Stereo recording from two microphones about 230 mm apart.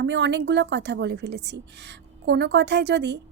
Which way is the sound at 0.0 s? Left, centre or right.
Right.